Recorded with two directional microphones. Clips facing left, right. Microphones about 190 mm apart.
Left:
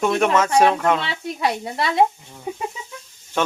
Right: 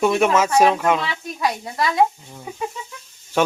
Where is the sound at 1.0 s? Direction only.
25° left (ahead or behind).